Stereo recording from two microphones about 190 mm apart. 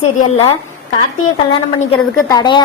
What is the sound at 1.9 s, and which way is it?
Speech, 20° left (ahead or behind).